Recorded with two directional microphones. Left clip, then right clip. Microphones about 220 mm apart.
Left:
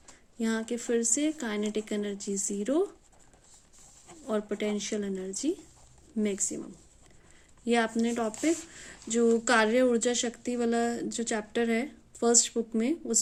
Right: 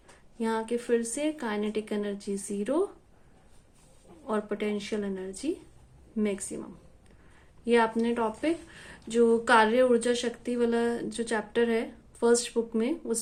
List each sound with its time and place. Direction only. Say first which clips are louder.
0.3 s speech: right 3 dB; 40° left (ahead or behind)
4.3 s speech: right 1 dB; 40° left (ahead or behind)
7.6 s speech: right 3 dB; 40° left (ahead or behind)